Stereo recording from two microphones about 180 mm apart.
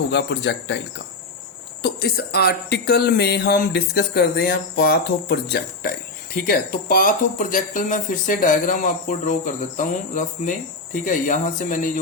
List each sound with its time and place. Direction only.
0.1 s speech: 70° left (ahead or behind)
1.8 s speech: 60° left (ahead or behind)